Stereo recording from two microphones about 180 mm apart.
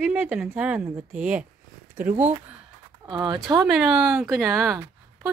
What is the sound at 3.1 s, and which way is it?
Speech, 25° right (ahead or behind).